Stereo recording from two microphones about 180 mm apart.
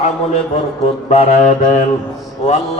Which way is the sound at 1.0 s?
40° left (ahead or behind).